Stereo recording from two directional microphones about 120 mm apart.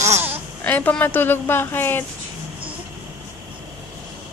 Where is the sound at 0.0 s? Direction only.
20° right (ahead or behind).